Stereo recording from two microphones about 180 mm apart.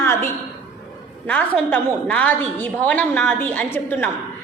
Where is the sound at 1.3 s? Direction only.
10° left (ahead or behind).